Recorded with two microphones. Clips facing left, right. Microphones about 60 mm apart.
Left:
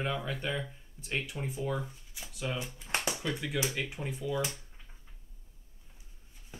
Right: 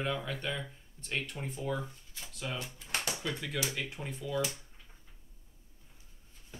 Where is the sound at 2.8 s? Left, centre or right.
Centre.